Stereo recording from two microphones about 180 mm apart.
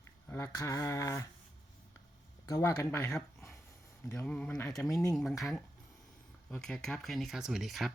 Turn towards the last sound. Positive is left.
turn(degrees=0)  # may be behind; listen again after turning